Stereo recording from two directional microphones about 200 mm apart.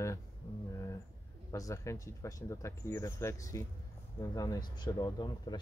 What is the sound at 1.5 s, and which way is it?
Speech, 15° left (ahead or behind).